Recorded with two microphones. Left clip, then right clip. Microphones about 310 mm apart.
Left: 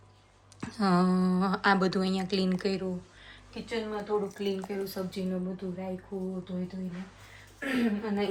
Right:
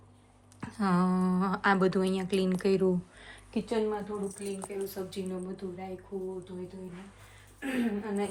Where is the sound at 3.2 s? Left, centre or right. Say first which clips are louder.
Right 6 dB; centre.